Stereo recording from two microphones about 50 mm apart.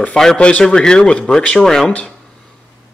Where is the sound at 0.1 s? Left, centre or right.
Centre.